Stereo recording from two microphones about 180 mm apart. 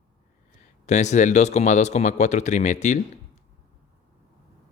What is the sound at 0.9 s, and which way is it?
Speech, 40° left (ahead or behind).